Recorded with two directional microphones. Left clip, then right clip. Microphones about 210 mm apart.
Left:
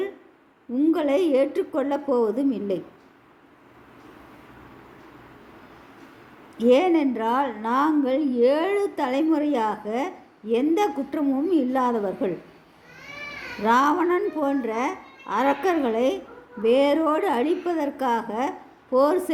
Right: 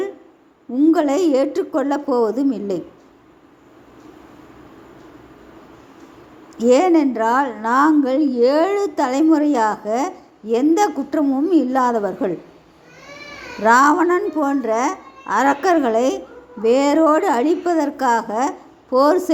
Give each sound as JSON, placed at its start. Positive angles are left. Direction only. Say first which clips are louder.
{"t": 0.7, "sound": "a woman's voice", "louder": "right 6 dB", "side_deg": -5}
{"t": 6.6, "sound": "a woman's voice", "louder": "right 5 dB", "side_deg": -10}
{"t": 13.6, "sound": "a woman's voice", "louder": "right 7 dB", "side_deg": -10}